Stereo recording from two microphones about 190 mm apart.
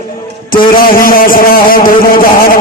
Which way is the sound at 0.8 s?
50° left (ahead or behind).